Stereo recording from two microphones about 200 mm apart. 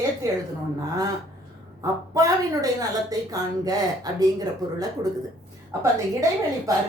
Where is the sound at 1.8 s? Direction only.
15° right (ahead or behind).